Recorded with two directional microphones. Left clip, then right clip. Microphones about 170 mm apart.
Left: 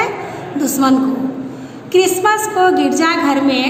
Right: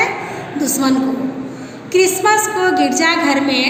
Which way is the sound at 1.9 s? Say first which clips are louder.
Even; 55° left (ahead or behind).